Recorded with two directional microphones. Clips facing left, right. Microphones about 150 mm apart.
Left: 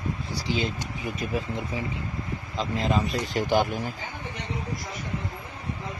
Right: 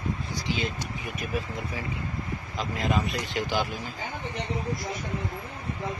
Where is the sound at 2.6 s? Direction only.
30° left (ahead or behind); by 3.8 s 55° left (ahead or behind).